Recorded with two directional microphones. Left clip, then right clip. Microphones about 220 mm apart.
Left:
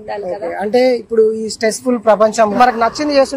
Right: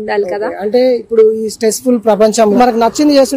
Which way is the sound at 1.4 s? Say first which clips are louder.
Right 3 dB; 30° right (ahead or behind).